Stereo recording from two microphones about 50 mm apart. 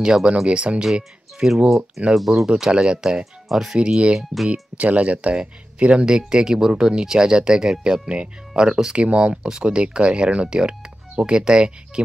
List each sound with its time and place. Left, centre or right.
0.0 s speech: centre
3.7 s speech: centre
4.5 s speech: right